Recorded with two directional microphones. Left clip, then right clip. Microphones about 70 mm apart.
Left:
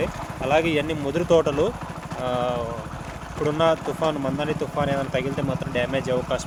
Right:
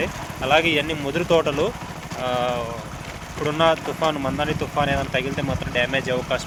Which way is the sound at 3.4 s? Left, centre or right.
Left.